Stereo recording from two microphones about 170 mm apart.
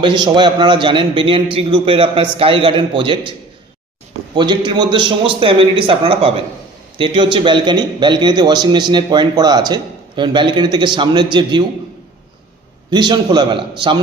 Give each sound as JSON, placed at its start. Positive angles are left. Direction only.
{"t": 0.0, "sound": "a man's voice", "side_deg": -25}
{"t": 4.4, "sound": "a man's voice", "side_deg": -25}
{"t": 12.9, "sound": "a man's voice", "side_deg": -25}